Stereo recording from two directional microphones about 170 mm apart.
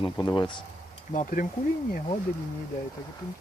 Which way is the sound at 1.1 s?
50° left (ahead or behind).